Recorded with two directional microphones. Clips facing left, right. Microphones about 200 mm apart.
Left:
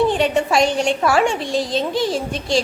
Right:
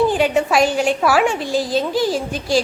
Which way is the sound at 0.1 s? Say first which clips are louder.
Right 1 dB; centre (ahead or behind).